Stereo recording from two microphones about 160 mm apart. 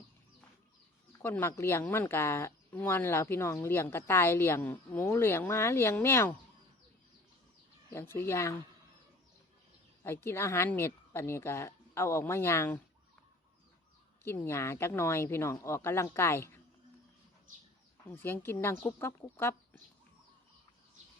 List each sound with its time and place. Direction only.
1.2 s speech: 15° left (ahead or behind)
7.9 s speech: 15° left (ahead or behind)
10.0 s speech: 15° left (ahead or behind)
14.3 s speech: 15° left (ahead or behind)
18.1 s speech: 15° left (ahead or behind)